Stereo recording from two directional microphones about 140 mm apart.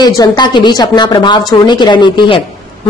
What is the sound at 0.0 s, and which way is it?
Speech, 30° left (ahead or behind).